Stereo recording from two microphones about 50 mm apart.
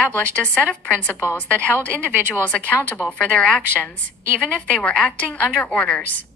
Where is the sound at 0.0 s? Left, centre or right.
Left.